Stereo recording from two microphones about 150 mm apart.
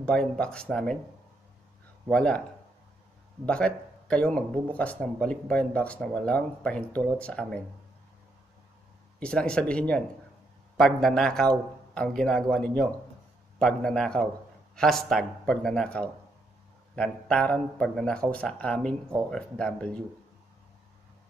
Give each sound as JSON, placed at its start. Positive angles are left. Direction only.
{"t": 0.0, "sound": "a man's voice", "side_deg": 5}
{"t": 2.0, "sound": "a man's voice", "side_deg": 5}
{"t": 3.4, "sound": "speech", "side_deg": 5}
{"t": 9.2, "sound": "a man's voice", "side_deg": 5}